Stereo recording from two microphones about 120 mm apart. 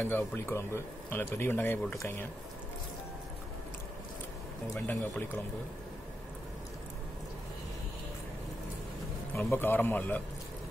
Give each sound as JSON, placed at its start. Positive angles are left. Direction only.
{"t": 0.0, "sound": "a man's voice", "side_deg": 15}
{"t": 4.7, "sound": "a man's voice", "side_deg": 15}
{"t": 9.3, "sound": "a man's voice", "side_deg": 15}